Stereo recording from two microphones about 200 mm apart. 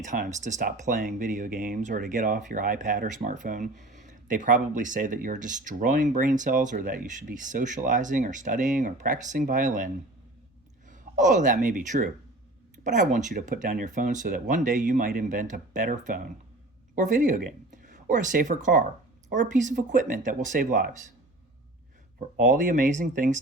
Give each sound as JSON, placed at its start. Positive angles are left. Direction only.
{"t": 0.0, "sound": "speech", "side_deg": -40}
{"t": 11.2, "sound": "speech", "side_deg": -40}
{"t": 22.4, "sound": "speech", "side_deg": -40}